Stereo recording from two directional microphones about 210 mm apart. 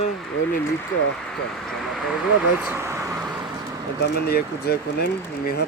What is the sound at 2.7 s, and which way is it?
Vehicle, 10° right (ahead or behind).